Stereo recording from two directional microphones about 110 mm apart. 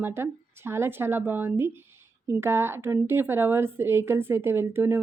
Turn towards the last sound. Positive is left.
turn(degrees=-20)  # may be behind; listen again after turning